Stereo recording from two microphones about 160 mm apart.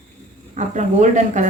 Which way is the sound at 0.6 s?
50° right (ahead or behind).